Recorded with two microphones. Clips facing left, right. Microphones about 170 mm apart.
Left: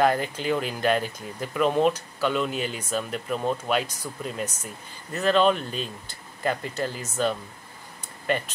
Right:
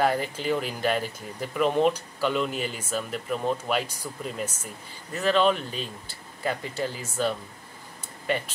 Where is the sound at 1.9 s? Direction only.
10° right (ahead or behind).